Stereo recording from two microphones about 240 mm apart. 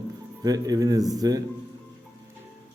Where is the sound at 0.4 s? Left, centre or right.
Centre.